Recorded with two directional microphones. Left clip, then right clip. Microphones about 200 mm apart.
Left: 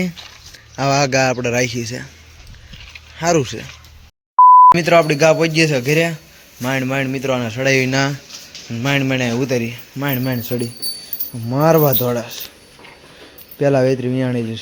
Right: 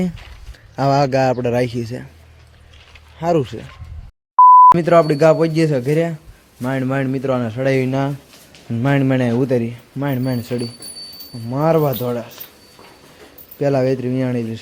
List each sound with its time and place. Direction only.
0.8 s speech: 20° right (ahead or behind)
3.2 s speech: 5° right (ahead or behind)
4.4 s beep: centre (ahead or behind)
4.8 s speech: 20° right (ahead or behind)
8.7 s speech: 25° right (ahead or behind)
11.4 s speech: 10° left (ahead or behind)
13.6 s speech: centre (ahead or behind)